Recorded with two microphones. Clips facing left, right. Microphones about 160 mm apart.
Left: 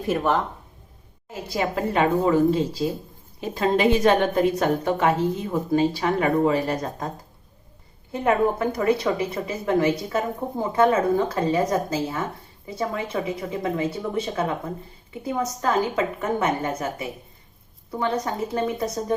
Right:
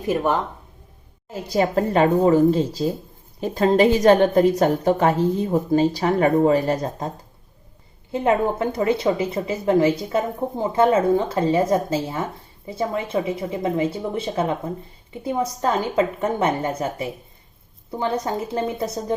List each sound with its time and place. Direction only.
1.3 s a woman's voice: 40° right (ahead or behind)
8.1 s a woman's voice: 25° right (ahead or behind)
18.5 s a woman's voice: 30° right (ahead or behind)